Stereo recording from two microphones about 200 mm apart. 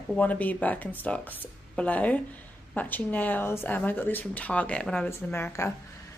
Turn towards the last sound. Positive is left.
turn(degrees=15)  # may be behind; listen again after turning